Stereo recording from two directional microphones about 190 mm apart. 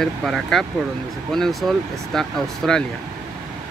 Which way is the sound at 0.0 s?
Centre (ahead or behind).